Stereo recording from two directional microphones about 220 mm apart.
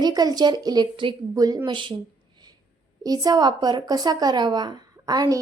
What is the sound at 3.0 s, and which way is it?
Speech, 15° right (ahead or behind).